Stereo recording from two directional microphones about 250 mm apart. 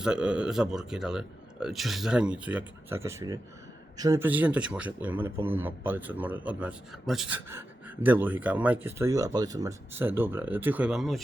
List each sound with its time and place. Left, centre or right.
0.0 s speech: centre